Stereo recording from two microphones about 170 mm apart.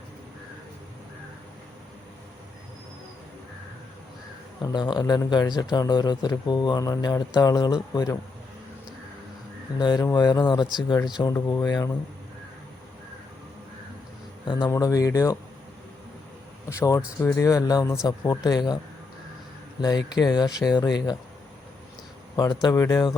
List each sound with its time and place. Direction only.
4.6 s speech: 25° left (ahead or behind)
9.7 s speech: 25° left (ahead or behind)
14.4 s speech: 25° left (ahead or behind)
16.6 s speech: 20° left (ahead or behind)
19.8 s speech: 25° left (ahead or behind)
22.4 s speech: 25° left (ahead or behind)